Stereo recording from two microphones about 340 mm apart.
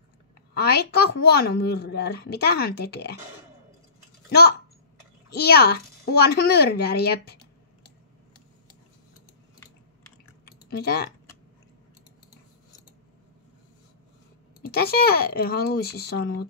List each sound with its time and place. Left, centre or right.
0.6 s a woman's voice: left
5.3 s a woman's voice: left
10.4 s typing: left
14.7 s a woman's voice: left